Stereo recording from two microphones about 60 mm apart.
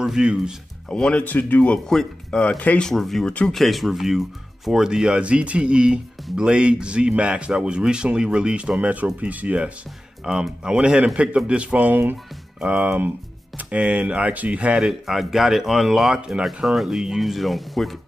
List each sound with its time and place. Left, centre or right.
0.0 s speech: centre
0.8 s speech: centre
1.2 s speech: left
1.9 s speech: centre
2.4 s speech: left
2.8 s speech: centre
3.6 s speech: centre; by 9.7 s right
10.2 s speech: centre
14.8 s speech: centre